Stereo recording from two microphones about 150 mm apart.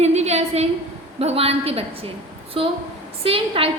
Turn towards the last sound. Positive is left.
turn(degrees=-40)  # may be behind; listen again after turning